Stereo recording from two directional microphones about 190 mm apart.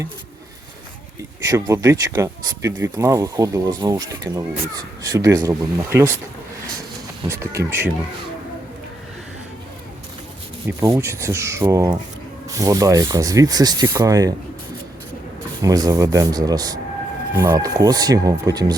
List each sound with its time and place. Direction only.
1.5 s speech: 15° right (ahead or behind)
7.3 s speech: 15° right (ahead or behind)
10.7 s speech: 15° right (ahead or behind)
15.6 s speech: 20° right (ahead or behind)